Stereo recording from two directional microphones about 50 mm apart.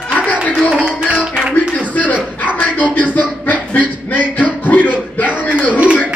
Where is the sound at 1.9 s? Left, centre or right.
Left.